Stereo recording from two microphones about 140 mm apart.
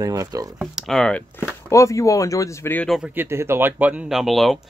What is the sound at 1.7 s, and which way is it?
Speech, 20° left (ahead or behind).